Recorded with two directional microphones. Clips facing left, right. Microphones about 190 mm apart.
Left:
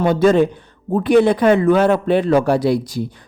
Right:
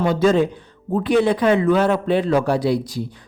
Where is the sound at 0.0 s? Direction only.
55° left (ahead or behind).